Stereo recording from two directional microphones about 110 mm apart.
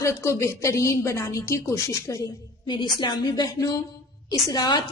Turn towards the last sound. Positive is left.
turn(degrees=40)  # may be behind; listen again after turning